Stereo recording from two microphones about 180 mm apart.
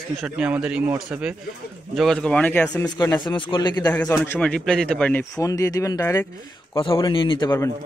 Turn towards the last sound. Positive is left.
turn(degrees=20)  # may be behind; listen again after turning